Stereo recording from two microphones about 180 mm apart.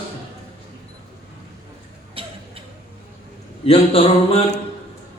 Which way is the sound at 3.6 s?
30° left (ahead or behind).